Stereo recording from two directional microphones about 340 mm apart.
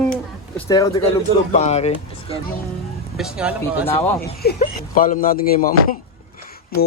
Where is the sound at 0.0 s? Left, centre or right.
Centre.